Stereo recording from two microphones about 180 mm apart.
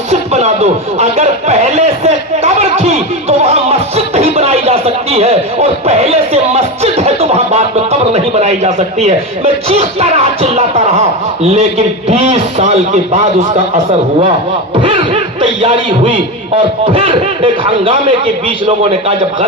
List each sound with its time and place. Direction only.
0.1 s speech: 35° right (ahead or behind)
12.0 s speech: 35° right (ahead or behind)
14.8 s speech: 30° right (ahead or behind)